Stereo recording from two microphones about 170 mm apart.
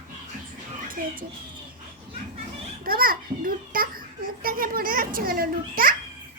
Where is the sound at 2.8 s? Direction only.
60° right (ahead or behind).